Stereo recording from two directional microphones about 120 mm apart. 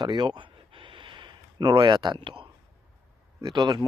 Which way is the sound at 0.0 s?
40° right (ahead or behind).